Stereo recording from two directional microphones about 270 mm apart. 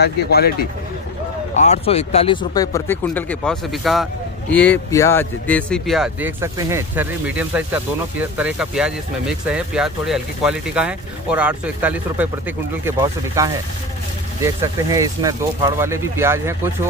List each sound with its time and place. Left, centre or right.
0.0 s speech: left
1.6 s speech: left; by 16.7 s centre